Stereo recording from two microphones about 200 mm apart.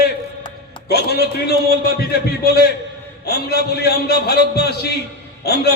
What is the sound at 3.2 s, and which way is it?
A man's voice, 55° left (ahead or behind).